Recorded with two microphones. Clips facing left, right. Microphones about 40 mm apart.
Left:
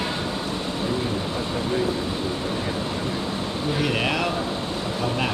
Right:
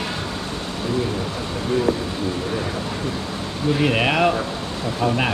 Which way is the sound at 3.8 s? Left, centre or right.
Right.